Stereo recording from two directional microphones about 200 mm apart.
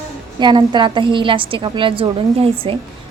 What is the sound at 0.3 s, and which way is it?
A woman's voice, 20° right (ahead or behind).